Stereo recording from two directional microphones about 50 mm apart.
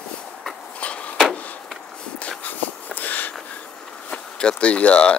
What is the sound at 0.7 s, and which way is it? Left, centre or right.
Vehicle, left.